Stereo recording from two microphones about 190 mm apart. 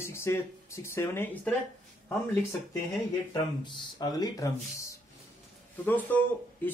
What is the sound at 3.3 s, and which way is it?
Speech, 20° left (ahead or behind).